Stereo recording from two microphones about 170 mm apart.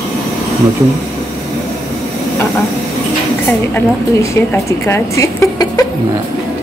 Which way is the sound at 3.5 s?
10° left (ahead or behind).